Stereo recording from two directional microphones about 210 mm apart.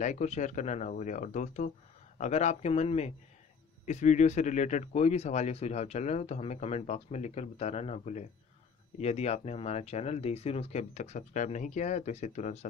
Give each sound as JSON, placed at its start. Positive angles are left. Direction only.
{"t": 0.0, "sound": "speech", "side_deg": 35}